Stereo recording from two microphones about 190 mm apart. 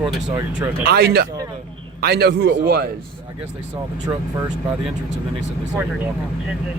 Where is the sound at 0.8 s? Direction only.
55° right (ahead or behind).